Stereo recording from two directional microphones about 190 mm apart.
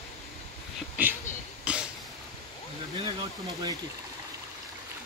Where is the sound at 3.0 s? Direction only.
20° right (ahead or behind).